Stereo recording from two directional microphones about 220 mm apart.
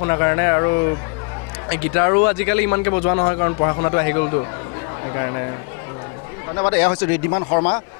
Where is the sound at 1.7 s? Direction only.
20° left (ahead or behind).